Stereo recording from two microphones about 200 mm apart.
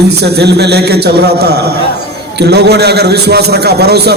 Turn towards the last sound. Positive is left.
turn(degrees=-55)  # may be behind; listen again after turning